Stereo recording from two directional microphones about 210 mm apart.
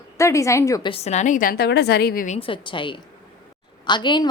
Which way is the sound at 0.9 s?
30° left (ahead or behind).